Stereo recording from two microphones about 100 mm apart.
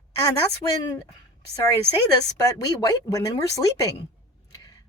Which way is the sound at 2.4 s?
35° left (ahead or behind).